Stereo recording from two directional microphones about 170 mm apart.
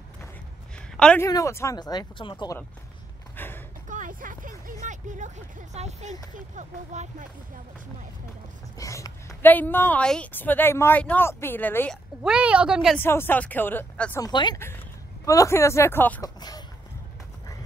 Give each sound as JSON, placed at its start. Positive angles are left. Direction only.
{"t": 0.9, "sound": "speech", "side_deg": 5}
{"t": 1.2, "sound": "speech", "side_deg": 15}
{"t": 3.3, "sound": "a sound", "side_deg": 10}
{"t": 3.9, "sound": "a sound", "side_deg": -50}
{"t": 6.3, "sound": "speech", "side_deg": -45}
{"t": 8.7, "sound": "a woman's voice", "side_deg": 20}
{"t": 12.2, "sound": "speech", "side_deg": -5}
{"t": 12.9, "sound": "a woman's voice", "side_deg": 15}
{"t": 14.2, "sound": "a woman's voice", "side_deg": 25}
{"t": 16.3, "sound": "chicken", "side_deg": 25}